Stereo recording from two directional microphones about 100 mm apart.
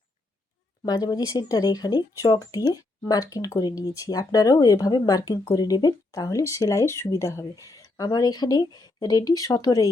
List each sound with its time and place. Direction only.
0.9 s speech: 40° left (ahead or behind)